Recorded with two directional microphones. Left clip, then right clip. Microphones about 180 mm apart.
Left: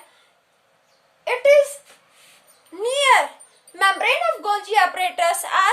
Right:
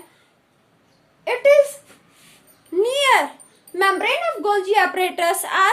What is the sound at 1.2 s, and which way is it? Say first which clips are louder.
A woman's voice: right 1 dB; 20° right (ahead or behind).